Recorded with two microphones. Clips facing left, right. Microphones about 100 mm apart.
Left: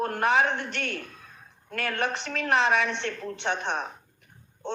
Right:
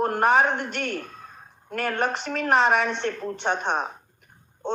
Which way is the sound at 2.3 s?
45° right (ahead or behind).